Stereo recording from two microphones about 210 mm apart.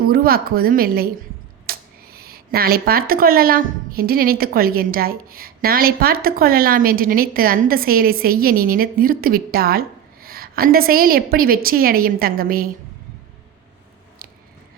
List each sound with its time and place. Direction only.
0.1 s a woman's voice: 45° right (ahead or behind)
1.7 s a sound: 45° right (ahead or behind)
2.1 s a woman's voice: 45° right (ahead or behind)